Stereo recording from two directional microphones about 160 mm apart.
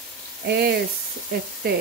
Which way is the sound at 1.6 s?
75° right (ahead or behind).